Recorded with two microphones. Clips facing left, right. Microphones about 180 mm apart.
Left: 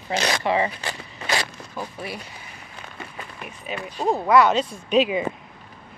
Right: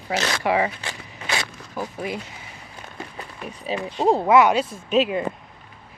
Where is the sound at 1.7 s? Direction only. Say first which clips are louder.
Right 4 dB; 15° right (ahead or behind).